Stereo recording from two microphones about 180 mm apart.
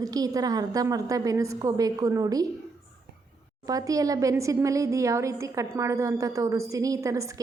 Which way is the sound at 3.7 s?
20° right (ahead or behind).